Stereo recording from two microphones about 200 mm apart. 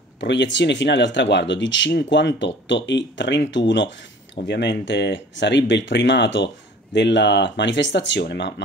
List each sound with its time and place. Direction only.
0.2 s speech: 60° left (ahead or behind)